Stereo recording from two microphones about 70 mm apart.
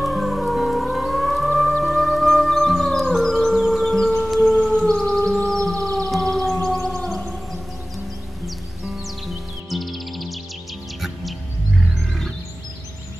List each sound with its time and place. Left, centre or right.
0.0 s music: centre
4.6 s siren: centre
7.1 s music: centre
8.5 s music: centre